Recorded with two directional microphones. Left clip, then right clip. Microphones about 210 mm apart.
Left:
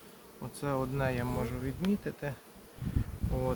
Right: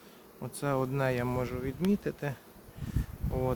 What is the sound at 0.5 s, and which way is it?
Speech, 65° right (ahead or behind).